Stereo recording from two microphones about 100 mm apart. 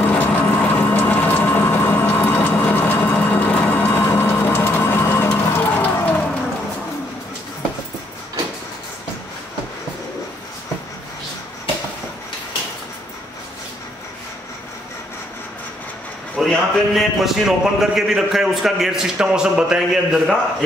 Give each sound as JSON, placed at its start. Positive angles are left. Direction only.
{"t": 0.0, "sound": "pump", "side_deg": 15}
{"t": 5.3, "sound": "a sound", "side_deg": 20}
{"t": 16.3, "sound": "a man's voice", "side_deg": 0}